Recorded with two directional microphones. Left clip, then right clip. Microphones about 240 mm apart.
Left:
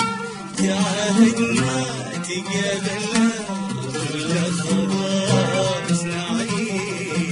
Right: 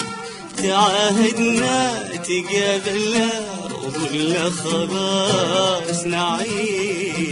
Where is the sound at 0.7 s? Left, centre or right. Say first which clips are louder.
Right 7 dB; right.